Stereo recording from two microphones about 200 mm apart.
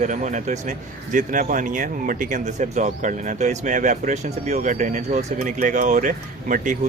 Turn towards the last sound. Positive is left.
turn(degrees=-40)  # may be behind; listen again after turning